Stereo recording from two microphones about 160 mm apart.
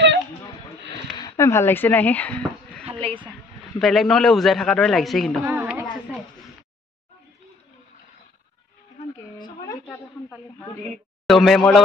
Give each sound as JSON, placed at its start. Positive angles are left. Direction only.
{"t": 0.9, "sound": "a sound", "side_deg": 25}
{"t": 2.9, "sound": "speech", "side_deg": -35}
{"t": 3.8, "sound": "speech", "side_deg": 0}
{"t": 5.4, "sound": "a sound", "side_deg": -15}
{"t": 9.8, "sound": "snake", "side_deg": 5}
{"t": 10.9, "sound": "a man's voice", "side_deg": 0}